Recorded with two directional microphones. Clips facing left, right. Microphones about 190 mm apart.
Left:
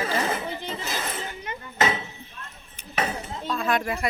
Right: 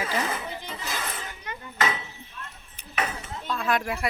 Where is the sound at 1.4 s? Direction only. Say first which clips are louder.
Left 3 dB; 25° left (ahead or behind).